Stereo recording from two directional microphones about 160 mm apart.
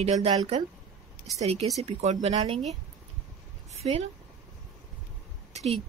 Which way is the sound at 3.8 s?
35° right (ahead or behind).